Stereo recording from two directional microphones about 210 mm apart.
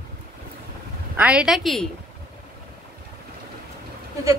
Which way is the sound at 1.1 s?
5° right (ahead or behind).